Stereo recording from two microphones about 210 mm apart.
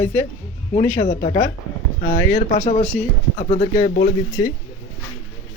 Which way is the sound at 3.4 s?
30° left (ahead or behind).